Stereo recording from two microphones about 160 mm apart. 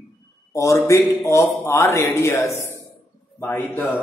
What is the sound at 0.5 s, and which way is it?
A man's voice, 20° left (ahead or behind).